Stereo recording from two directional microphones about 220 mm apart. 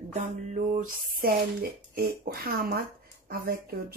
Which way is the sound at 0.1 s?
35° right (ahead or behind).